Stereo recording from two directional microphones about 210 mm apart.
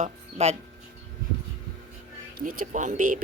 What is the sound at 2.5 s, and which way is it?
Speech, 40° right (ahead or behind).